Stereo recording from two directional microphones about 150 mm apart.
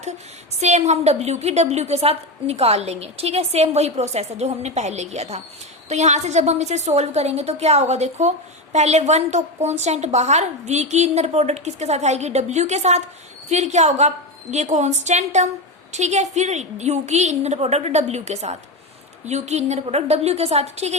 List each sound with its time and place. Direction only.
0.6 s a woman's voice: 50° right (ahead or behind)